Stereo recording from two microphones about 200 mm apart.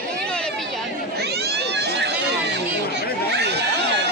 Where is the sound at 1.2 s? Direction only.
55° right (ahead or behind).